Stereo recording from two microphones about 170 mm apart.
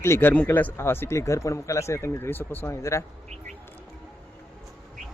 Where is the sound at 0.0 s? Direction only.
15° left (ahead or behind).